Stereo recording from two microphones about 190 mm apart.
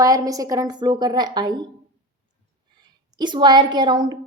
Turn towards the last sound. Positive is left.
turn(degrees=-25)  # may be behind; listen again after turning